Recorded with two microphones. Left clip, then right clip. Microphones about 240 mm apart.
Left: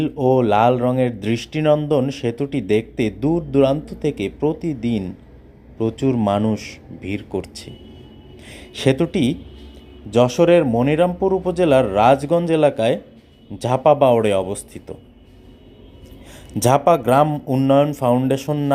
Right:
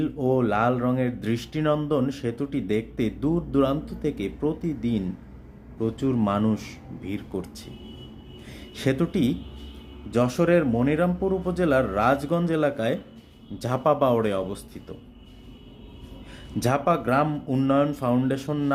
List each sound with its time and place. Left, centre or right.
0.0 s speech: centre
16.6 s speech: centre